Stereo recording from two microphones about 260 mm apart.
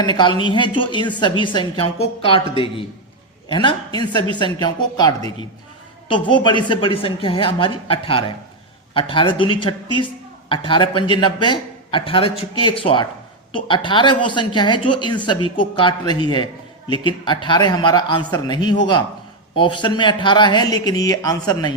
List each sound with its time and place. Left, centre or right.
0.0 s a woman's voice: centre